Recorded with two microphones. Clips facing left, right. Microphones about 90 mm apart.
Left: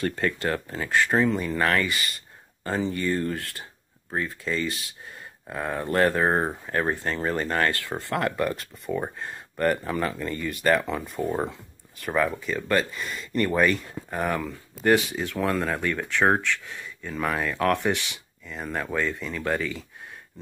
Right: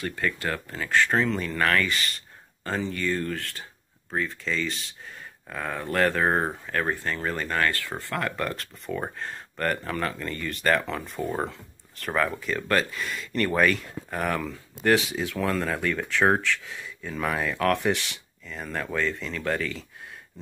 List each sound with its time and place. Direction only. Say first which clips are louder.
0.0 s speech: left 3 dB; 35° left (ahead or behind); by 11.1 s 15° left (ahead or behind)
11.1 s speech: left 2 dB; centre (ahead or behind)